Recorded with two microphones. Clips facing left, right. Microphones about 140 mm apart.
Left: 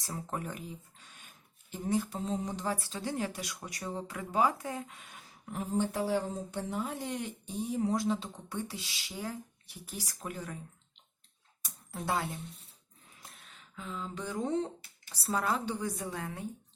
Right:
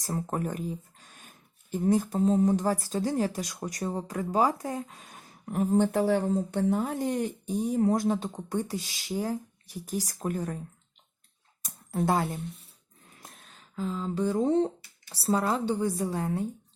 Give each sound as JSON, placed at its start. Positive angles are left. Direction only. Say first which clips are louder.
{"t": 0.0, "sound": "speech", "louder": "right 7 dB", "side_deg": -45}
{"t": 11.6, "sound": "a sound", "louder": "right 10 dB", "side_deg": -45}
{"t": 13.2, "sound": "a woman's voice", "louder": "right 3 dB", "side_deg": -40}